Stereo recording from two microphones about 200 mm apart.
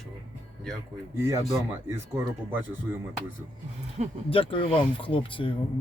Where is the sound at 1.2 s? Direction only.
15° right (ahead or behind).